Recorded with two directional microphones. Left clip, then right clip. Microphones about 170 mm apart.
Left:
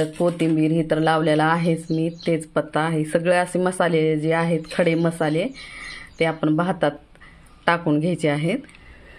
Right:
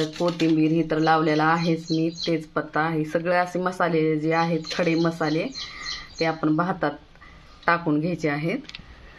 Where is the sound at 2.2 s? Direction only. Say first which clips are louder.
Left 3 dB; 90° left.